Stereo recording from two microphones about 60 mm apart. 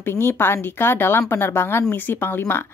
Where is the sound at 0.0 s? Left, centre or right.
Left.